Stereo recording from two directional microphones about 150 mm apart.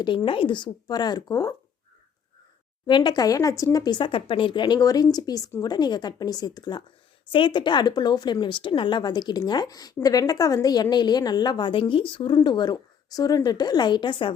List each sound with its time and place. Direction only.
0.0 s a woman's voice: 30° left (ahead or behind)
2.8 s a woman's voice: 30° left (ahead or behind)